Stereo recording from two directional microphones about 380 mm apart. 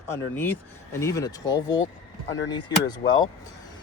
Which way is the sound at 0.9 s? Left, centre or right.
Centre.